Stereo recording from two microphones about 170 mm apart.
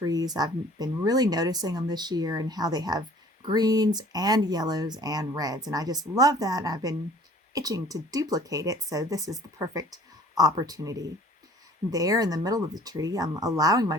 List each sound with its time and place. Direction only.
0.0 s speech: 20° right (ahead or behind)